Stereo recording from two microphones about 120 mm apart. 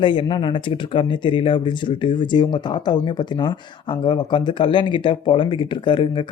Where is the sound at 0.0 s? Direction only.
45° left (ahead or behind).